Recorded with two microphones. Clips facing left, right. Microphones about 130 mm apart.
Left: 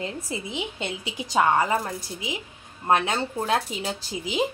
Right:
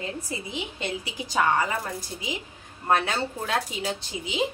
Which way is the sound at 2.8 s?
20° left (ahead or behind).